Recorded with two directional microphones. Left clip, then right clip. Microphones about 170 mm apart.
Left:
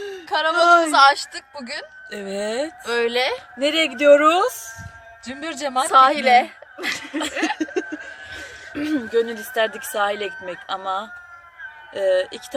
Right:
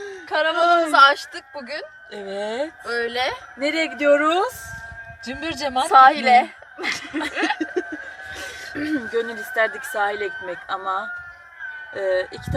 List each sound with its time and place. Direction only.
0.0 s a woman's voice: 15° left (ahead or behind)
2.1 s speech: 40° left (ahead or behind)
2.8 s a woman's voice: 15° left (ahead or behind)
5.9 s a woman's voice: 10° left (ahead or behind)
7.3 s snicker: centre (ahead or behind)
7.6 s a sound: 30° left (ahead or behind)
8.7 s a sound: 20° left (ahead or behind)
9.9 s speech: 25° left (ahead or behind)